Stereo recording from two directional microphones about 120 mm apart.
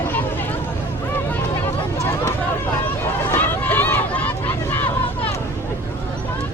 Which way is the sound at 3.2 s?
15° left (ahead or behind).